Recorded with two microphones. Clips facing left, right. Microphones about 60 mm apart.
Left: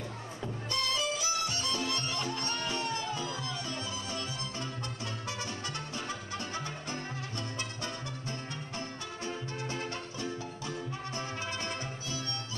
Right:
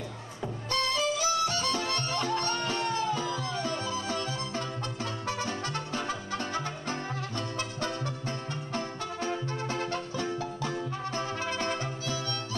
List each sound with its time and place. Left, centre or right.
0.7 s music: right